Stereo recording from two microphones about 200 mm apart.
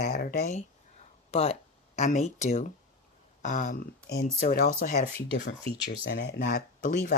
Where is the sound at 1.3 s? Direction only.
30° left (ahead or behind).